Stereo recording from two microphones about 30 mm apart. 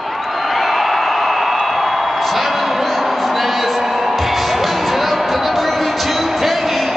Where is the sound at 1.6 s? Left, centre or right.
Centre.